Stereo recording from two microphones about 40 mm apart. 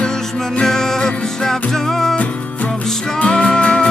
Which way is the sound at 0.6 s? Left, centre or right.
Centre.